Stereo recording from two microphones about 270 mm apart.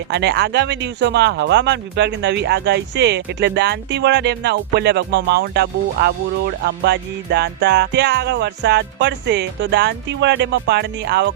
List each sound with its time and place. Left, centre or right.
0.1 s speech: right